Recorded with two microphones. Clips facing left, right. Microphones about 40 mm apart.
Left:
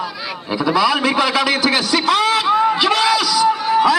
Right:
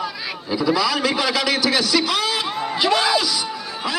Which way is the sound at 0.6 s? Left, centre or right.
Left.